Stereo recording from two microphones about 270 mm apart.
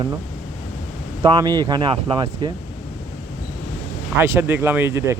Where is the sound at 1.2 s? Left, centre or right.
Centre.